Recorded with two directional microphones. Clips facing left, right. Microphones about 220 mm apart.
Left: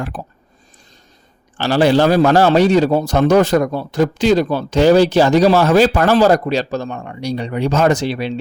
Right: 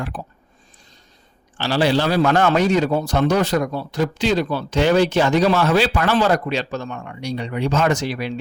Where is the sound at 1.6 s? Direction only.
50° left (ahead or behind).